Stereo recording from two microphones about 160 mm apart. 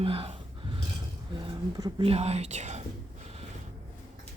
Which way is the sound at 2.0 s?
40° right (ahead or behind).